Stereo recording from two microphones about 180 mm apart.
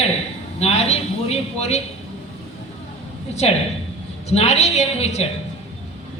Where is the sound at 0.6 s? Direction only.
35° left (ahead or behind).